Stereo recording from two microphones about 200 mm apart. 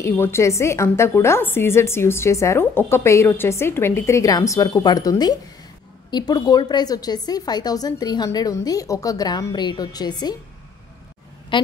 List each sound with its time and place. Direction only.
0.0 s a woman's voice: 15° left (ahead or behind)
11.5 s a woman's voice: 25° left (ahead or behind)